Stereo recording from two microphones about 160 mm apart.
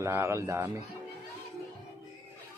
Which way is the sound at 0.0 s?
15° right (ahead or behind).